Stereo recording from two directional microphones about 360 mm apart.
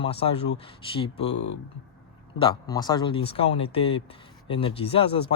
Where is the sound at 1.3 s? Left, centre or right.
Left.